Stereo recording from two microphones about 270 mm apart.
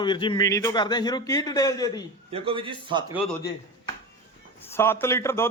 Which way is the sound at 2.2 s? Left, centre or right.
Right.